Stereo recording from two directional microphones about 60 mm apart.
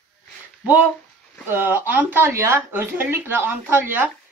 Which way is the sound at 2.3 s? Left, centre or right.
Right.